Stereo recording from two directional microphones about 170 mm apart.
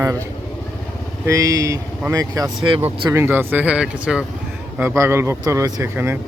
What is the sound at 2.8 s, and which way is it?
Speech, 15° right (ahead or behind).